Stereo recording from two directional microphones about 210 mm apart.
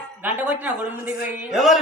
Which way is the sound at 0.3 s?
10° right (ahead or behind).